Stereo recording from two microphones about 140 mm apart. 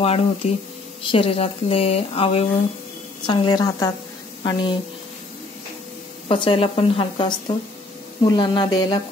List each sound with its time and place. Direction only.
0.0 s speech: 45° left (ahead or behind)
3.3 s a woman's voice: 30° left (ahead or behind)
6.2 s a woman's voice: 40° left (ahead or behind)